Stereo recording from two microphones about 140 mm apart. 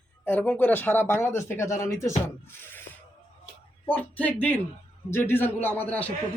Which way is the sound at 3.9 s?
10° left (ahead or behind).